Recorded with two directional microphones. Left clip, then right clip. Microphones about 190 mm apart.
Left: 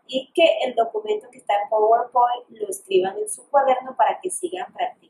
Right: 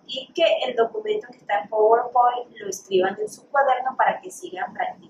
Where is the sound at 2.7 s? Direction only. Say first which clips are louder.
Left 1 dB; 15° left (ahead or behind).